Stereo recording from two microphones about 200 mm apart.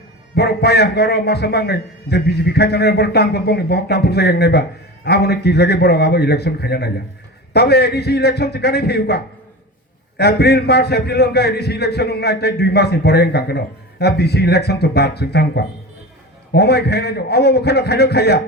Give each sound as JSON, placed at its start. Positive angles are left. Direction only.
{"t": 0.3, "sound": "a man's voice", "side_deg": 55}